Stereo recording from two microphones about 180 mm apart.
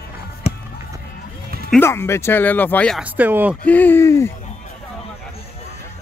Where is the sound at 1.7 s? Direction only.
15° left (ahead or behind).